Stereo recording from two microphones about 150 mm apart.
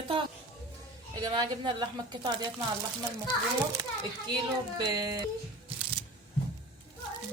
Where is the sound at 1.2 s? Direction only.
25° right (ahead or behind).